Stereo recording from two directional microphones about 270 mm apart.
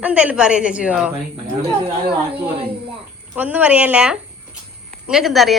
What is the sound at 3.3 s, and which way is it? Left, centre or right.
Speech, centre.